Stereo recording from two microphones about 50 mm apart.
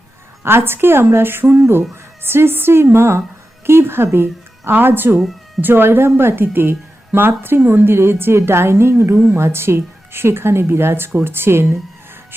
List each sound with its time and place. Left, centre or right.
0.4 s a woman's voice: right
9.1 s speech: right
9.4 s speech: right